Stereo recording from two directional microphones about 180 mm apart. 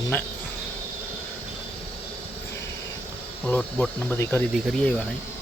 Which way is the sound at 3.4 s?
10° left (ahead or behind).